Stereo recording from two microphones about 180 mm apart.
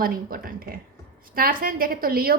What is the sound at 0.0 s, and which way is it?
A woman's voice, 55° right (ahead or behind).